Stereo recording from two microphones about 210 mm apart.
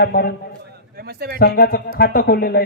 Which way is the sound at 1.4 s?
45° left (ahead or behind).